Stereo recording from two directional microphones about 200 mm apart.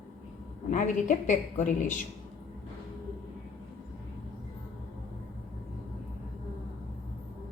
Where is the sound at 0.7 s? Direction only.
40° left (ahead or behind).